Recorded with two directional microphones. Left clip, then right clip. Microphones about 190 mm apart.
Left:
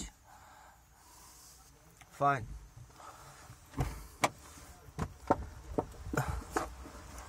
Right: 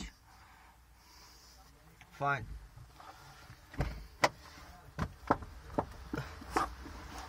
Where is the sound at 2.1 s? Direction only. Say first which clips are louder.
Left 4 dB; 35° left (ahead or behind).